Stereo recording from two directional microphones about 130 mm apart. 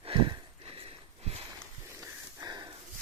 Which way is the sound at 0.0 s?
40° right (ahead or behind).